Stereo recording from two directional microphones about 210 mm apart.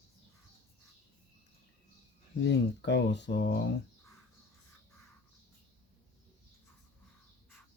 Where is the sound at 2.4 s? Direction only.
55° left (ahead or behind).